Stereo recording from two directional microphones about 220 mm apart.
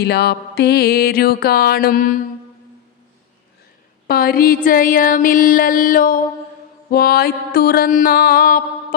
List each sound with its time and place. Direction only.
0.0 s music: 45° left (ahead or behind)
4.0 s a sound: 45° left (ahead or behind)
6.9 s music: 45° left (ahead or behind)